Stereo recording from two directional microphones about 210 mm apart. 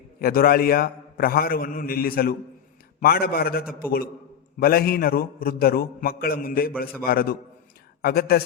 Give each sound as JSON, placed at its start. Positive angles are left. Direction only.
{"t": 0.2, "sound": "a man's voice", "side_deg": 45}